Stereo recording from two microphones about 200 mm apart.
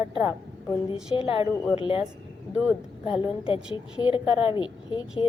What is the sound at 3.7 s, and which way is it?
A woman's voice, 25° left (ahead or behind).